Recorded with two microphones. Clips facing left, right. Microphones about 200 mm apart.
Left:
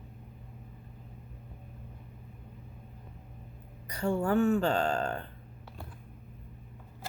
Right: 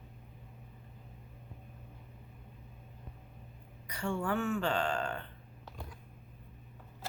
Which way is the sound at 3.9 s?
40° left (ahead or behind).